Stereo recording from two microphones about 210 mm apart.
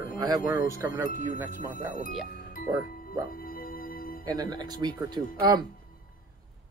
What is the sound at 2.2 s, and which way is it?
Music, 45° left (ahead or behind).